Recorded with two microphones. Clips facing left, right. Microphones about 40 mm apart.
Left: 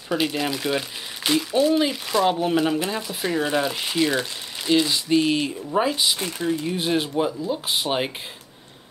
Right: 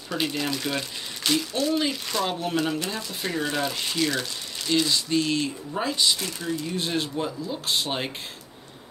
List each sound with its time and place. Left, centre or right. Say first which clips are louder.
0.1 s speech: left 4 dB; centre
6.2 s speech: left 5 dB; left